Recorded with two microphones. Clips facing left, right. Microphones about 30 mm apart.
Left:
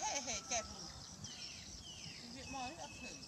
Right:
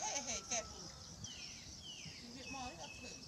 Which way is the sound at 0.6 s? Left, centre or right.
Left.